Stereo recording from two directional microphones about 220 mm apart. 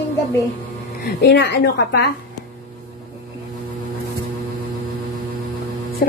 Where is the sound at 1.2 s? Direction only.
50° left (ahead or behind).